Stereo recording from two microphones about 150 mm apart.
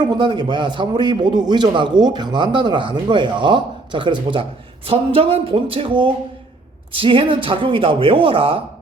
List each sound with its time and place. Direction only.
0.2 s a man's voice: 30° right (ahead or behind)